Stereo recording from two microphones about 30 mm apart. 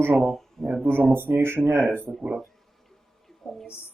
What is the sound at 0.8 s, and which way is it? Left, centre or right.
Speech, right.